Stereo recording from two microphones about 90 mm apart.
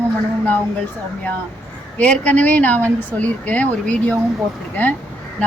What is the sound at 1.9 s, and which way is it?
A woman's voice, 15° left (ahead or behind).